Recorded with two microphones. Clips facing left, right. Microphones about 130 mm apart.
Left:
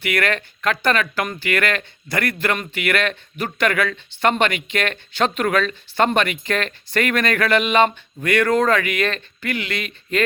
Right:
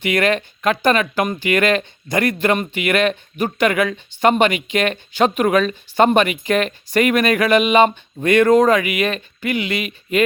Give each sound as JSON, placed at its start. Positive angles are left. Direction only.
{"t": 0.0, "sound": "speech", "side_deg": -20}